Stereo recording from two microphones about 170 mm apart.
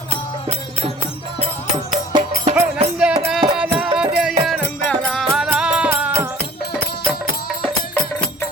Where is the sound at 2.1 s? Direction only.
25° right (ahead or behind).